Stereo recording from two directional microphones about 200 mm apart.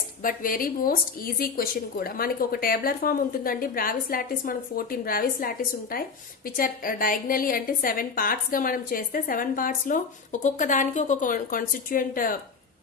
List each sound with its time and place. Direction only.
0.2 s a woman's voice: 45° left (ahead or behind)